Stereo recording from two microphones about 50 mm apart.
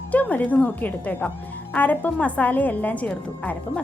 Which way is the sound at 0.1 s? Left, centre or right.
Left.